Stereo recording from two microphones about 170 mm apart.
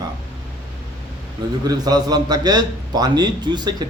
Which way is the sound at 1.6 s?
25° right (ahead or behind).